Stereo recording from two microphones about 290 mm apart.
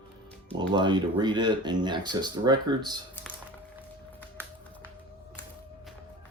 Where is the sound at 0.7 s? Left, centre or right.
Centre.